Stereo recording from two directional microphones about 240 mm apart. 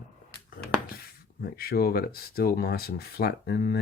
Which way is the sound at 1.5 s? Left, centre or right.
Left.